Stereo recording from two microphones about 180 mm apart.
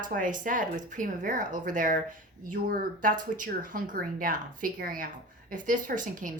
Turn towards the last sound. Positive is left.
turn(degrees=-45)  # may be behind; listen again after turning